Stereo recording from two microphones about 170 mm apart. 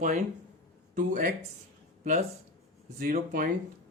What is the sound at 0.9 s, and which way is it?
Speech, 55° right (ahead or behind).